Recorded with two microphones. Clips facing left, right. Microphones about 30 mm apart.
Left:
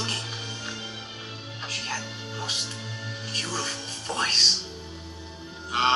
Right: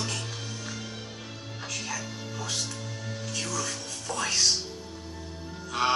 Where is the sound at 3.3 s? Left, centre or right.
Left.